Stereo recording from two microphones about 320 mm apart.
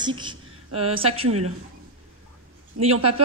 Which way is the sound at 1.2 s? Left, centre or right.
Right.